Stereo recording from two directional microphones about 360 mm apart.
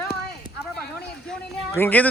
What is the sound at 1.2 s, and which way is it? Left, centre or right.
Speech, centre.